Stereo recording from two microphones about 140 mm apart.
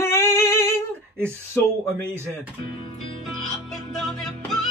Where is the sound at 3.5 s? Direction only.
Centre (ahead or behind).